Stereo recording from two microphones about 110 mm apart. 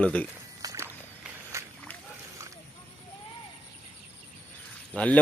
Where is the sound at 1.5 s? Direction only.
25° right (ahead or behind).